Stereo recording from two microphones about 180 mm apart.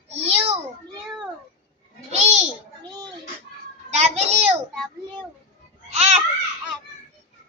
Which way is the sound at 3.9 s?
35° right (ahead or behind).